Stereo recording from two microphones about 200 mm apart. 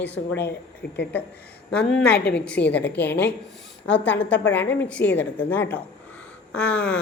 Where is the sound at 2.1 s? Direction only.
55° left (ahead or behind).